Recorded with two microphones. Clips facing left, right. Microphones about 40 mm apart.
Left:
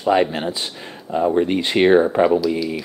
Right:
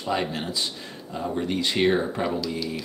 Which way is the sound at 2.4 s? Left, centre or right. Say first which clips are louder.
Left 8 dB; centre.